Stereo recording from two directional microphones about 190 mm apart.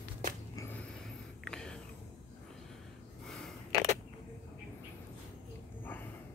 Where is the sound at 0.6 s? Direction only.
10° left (ahead or behind).